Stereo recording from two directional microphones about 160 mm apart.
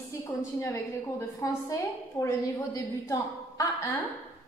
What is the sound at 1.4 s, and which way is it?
A woman's voice, 20° left (ahead or behind).